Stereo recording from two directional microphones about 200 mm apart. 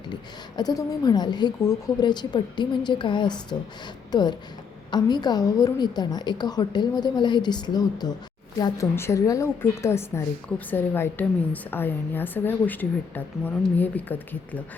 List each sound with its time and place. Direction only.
0.1 s a woman's voice: 20° left (ahead or behind)